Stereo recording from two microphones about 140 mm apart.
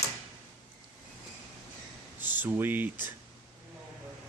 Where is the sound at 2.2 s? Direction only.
15° right (ahead or behind).